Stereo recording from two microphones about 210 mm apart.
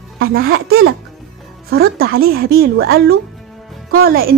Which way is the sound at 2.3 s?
50° right (ahead or behind).